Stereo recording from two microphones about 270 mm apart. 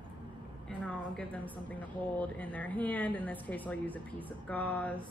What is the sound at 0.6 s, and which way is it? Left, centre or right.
A woman's voice, centre.